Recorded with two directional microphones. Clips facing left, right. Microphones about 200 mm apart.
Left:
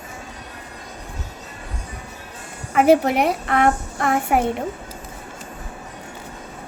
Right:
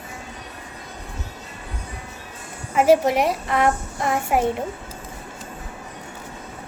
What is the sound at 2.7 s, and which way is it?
A child's voice, 60° left (ahead or behind).